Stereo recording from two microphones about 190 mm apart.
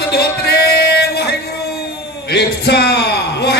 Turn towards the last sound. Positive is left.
turn(degrees=60)  # may be behind; listen again after turning